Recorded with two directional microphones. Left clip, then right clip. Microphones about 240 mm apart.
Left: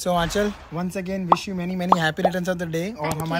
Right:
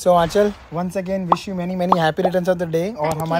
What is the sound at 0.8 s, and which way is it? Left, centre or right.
Speech, right.